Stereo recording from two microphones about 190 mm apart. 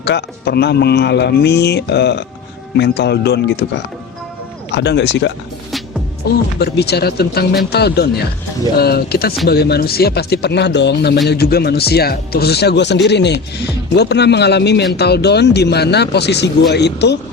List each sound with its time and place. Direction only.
0.0 s speech: 60° left (ahead or behind)
4.7 s speech: 65° left (ahead or behind)
6.6 s speech: 60° left (ahead or behind)